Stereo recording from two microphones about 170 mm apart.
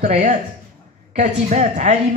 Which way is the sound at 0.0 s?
50° right (ahead or behind).